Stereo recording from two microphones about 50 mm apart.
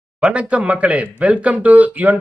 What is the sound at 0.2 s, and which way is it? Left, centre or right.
Speech, right.